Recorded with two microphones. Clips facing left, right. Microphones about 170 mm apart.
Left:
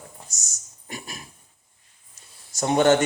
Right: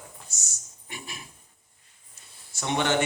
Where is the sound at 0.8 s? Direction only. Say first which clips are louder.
Left 4 dB; 40° left (ahead or behind).